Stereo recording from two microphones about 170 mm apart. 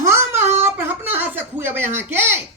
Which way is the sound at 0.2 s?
40° right (ahead or behind).